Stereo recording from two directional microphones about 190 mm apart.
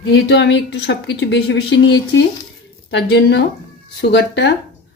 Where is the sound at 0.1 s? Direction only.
65° left (ahead or behind).